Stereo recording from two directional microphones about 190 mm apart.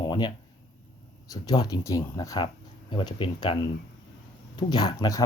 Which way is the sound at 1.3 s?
20° left (ahead or behind).